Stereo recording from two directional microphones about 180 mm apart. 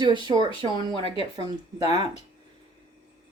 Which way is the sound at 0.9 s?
30° left (ahead or behind).